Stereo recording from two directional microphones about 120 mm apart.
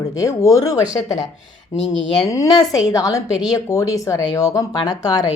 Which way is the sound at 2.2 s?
30° left (ahead or behind).